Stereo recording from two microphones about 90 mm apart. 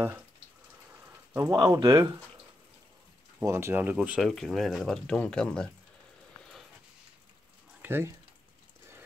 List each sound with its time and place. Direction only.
1.5 s speech: 40° right (ahead or behind)
3.3 s speech: 30° right (ahead or behind); by 4.2 s 15° right (ahead or behind)
4.2 s speech: centre (ahead or behind)
7.8 s speech: 25° right (ahead or behind)